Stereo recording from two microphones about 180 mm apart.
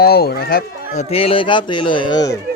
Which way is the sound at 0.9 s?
35° left (ahead or behind).